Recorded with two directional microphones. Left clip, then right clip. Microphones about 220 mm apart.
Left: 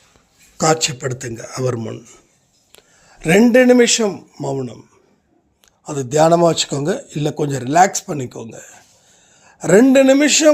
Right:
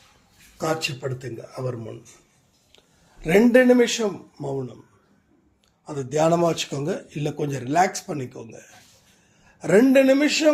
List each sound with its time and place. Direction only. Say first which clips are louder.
0.6 s a man's voice: left 9 dB; 45° left (ahead or behind)
5.8 s a man's voice: left 7 dB; 45° left (ahead or behind)